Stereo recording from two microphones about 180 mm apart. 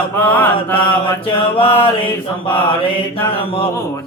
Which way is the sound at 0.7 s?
30° left (ahead or behind).